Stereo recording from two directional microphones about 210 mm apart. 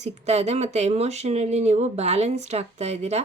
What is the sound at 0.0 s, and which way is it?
A woman's voice, 30° right (ahead or behind).